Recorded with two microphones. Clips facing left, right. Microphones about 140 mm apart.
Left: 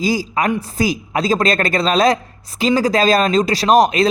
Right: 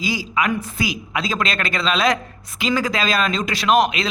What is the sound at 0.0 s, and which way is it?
A man's voice, 40° left (ahead or behind).